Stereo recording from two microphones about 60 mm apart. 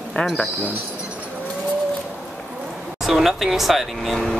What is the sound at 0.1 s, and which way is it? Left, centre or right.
Speech, centre.